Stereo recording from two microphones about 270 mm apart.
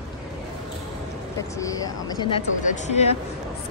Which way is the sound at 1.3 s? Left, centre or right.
Centre.